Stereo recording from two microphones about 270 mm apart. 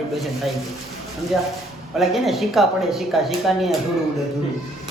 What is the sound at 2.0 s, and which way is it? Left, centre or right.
A man's voice, centre.